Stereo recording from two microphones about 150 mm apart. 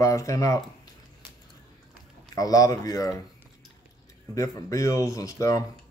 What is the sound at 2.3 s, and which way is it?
Speech, 25° left (ahead or behind).